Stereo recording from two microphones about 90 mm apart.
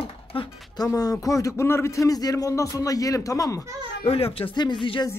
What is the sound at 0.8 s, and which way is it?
A man's voice, 45° left (ahead or behind).